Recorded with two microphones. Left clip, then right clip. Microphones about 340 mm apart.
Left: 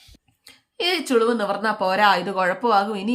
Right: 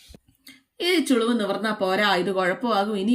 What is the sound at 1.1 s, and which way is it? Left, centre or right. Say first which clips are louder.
Speech: left 5 dB; left.